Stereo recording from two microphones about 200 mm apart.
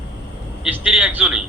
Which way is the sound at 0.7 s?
5° right (ahead or behind).